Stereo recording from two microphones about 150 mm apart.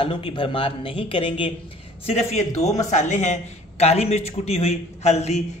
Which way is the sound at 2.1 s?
45° left (ahead or behind).